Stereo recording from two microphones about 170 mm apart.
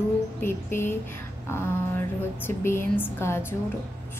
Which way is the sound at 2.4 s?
15° left (ahead or behind).